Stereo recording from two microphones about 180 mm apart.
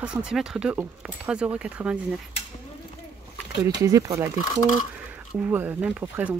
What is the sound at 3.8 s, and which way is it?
Speech, 20° right (ahead or behind).